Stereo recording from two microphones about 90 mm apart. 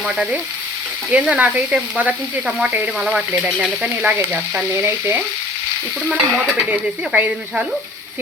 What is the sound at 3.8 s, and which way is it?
Frying, 15° right (ahead or behind).